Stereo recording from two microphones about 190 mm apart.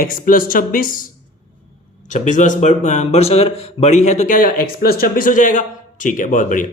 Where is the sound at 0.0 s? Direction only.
45° left (ahead or behind).